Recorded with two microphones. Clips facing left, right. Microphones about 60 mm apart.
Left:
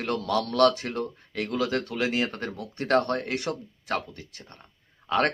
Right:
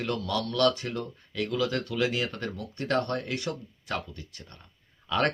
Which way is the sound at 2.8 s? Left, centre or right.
Left.